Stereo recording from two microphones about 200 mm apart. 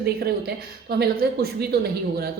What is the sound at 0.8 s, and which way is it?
Speech, 50° right (ahead or behind).